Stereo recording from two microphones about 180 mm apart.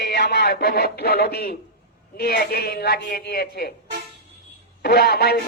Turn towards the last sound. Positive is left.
turn(degrees=60)  # may be behind; listen again after turning